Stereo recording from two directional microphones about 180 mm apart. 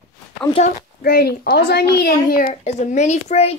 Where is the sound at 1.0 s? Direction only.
60° left (ahead or behind).